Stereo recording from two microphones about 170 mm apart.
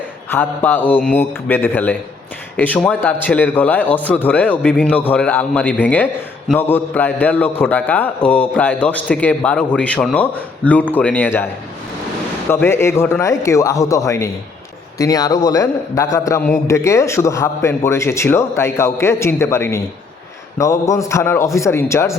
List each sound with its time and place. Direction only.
0.3 s a man's voice: 10° left (ahead or behind)
12.5 s a man's voice: 15° left (ahead or behind)